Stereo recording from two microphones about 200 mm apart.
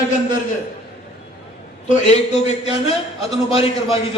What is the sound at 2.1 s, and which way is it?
A man's voice, 35° left (ahead or behind).